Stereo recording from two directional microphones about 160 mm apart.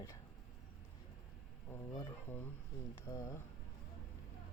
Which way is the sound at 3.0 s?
20° left (ahead or behind).